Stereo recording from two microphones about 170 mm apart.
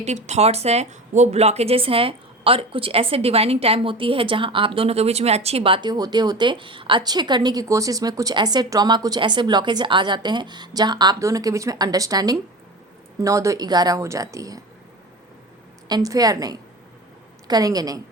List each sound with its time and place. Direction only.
0.0 s speech: 40° right (ahead or behind); by 14.6 s 20° right (ahead or behind)
15.9 s speech: 20° right (ahead or behind)